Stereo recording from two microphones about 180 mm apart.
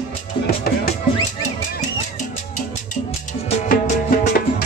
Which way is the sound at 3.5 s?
40° left (ahead or behind).